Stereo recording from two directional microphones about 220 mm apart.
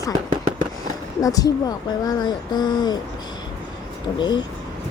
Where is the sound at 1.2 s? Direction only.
15° left (ahead or behind).